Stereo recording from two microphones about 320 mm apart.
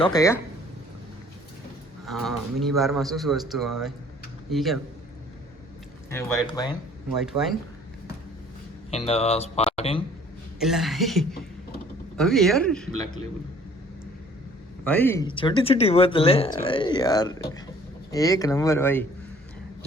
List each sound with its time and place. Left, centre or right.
0.0 s speech: centre
2.0 s a man's voice: centre
6.1 s speech: centre
7.2 s a man's voice: centre
8.9 s speech: centre
10.6 s a man's voice: centre
14.8 s speech: centre